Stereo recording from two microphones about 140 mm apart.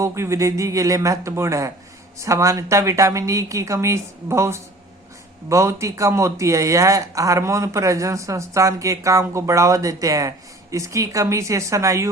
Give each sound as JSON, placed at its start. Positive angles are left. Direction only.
{"t": 0.0, "sound": "speech", "side_deg": -20}